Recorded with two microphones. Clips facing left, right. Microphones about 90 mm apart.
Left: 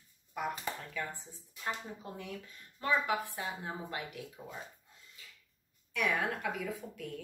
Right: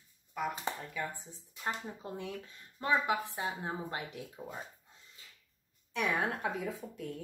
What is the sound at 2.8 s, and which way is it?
Speech, 25° right (ahead or behind).